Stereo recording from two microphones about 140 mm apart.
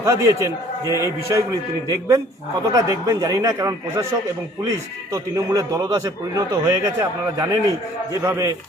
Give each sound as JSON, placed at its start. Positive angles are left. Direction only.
{"t": 0.0, "sound": "a man's voice", "side_deg": -20}